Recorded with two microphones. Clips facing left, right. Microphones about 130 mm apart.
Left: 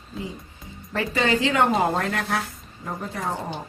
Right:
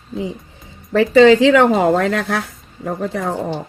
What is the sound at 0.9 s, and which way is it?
Speech, 90° right.